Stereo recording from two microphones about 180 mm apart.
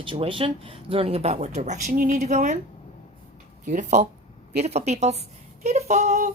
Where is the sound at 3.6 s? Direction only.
40° right (ahead or behind).